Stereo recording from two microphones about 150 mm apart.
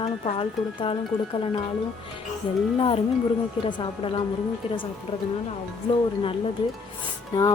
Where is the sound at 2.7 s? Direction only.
40° left (ahead or behind).